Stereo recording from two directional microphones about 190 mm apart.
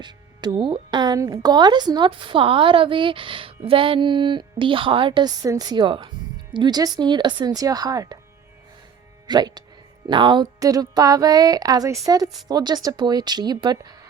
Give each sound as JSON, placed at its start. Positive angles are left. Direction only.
{"t": 0.0, "sound": "a woman's voice", "side_deg": -25}
{"t": 9.2, "sound": "a woman's voice", "side_deg": -20}